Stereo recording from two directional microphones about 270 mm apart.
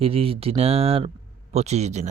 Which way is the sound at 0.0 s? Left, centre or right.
Right.